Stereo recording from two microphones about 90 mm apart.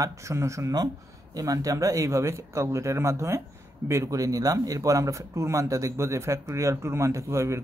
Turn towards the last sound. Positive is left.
turn(degrees=-30)  # may be behind; listen again after turning